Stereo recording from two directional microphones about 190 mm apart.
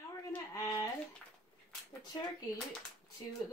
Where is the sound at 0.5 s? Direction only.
20° left (ahead or behind).